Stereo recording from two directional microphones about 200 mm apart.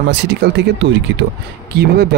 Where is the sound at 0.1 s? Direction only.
60° right (ahead or behind).